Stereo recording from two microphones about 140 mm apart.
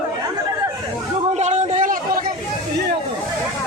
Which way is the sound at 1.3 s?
55° right (ahead or behind).